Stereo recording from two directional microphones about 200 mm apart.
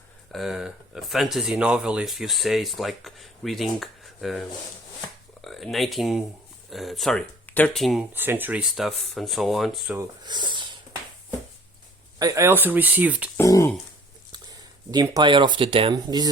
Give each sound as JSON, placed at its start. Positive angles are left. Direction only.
{"t": 0.3, "sound": "speech", "side_deg": 0}
{"t": 8.1, "sound": "speech", "side_deg": -10}
{"t": 9.9, "sound": "speech", "side_deg": -15}
{"t": 12.2, "sound": "speech", "side_deg": -15}
{"t": 13.3, "sound": "speech", "side_deg": 15}
{"t": 14.8, "sound": "speech", "side_deg": -20}